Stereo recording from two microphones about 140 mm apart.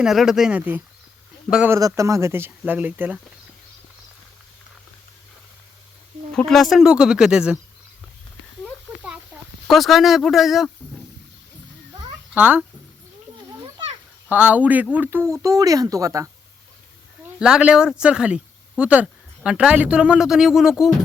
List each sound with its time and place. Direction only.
0.0 s speech: 5° right (ahead or behind)
1.7 s speech: 20° right (ahead or behind)
6.3 s speech: 5° left (ahead or behind)
9.6 s speech: centre (ahead or behind)
12.3 s speech: 10° right (ahead or behind)
14.3 s speech: 10° right (ahead or behind)
17.4 s speech: 5° right (ahead or behind)